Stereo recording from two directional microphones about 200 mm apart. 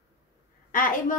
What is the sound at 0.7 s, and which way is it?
Speech, 45° left (ahead or behind).